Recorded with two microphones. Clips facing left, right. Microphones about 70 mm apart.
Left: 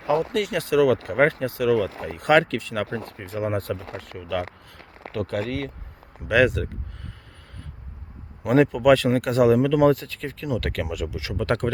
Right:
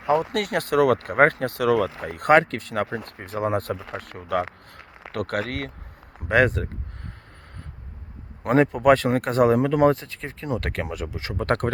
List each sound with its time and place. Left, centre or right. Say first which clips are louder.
0.0 s speech: right 1 dB; right
0.3 s speech: even; right
2.3 s speech: right 1 dB; right
2.6 s speech: right 1 dB; right
5.1 s speech: even; right
6.2 s speech: even; right
8.4 s speech: even; right
9.9 s speech: left 2 dB; right